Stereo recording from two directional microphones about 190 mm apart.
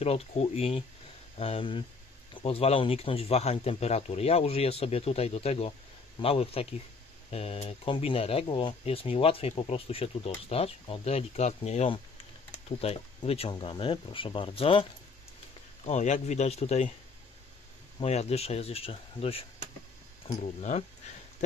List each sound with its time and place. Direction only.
0.0 s speech: 35° left (ahead or behind)
18.0 s speech: 35° left (ahead or behind)